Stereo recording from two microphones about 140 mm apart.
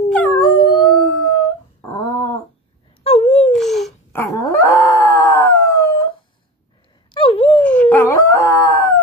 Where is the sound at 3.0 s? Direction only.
45° left (ahead or behind).